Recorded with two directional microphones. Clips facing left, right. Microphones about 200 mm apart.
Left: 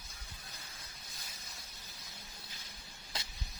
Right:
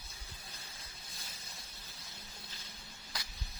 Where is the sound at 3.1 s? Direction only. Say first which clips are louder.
Left 2 dB; 25° left (ahead or behind).